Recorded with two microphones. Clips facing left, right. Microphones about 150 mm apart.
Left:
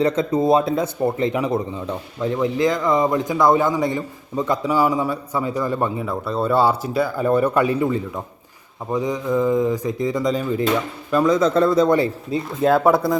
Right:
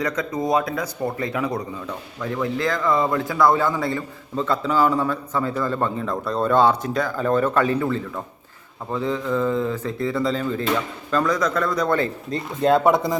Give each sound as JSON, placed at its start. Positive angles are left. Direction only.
{"t": 0.0, "sound": "speech", "side_deg": 30}
{"t": 11.3, "sound": "speech", "side_deg": 30}
{"t": 11.9, "sound": "speech", "side_deg": 10}